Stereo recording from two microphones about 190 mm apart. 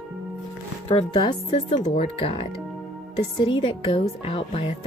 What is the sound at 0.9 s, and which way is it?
A woman's voice, 25° left (ahead or behind).